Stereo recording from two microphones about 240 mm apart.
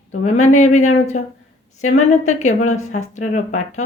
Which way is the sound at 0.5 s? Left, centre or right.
Left.